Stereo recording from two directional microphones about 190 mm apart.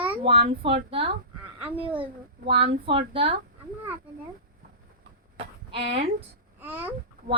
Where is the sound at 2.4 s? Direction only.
30° right (ahead or behind).